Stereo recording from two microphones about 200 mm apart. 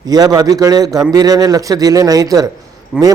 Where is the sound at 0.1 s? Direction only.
20° right (ahead or behind).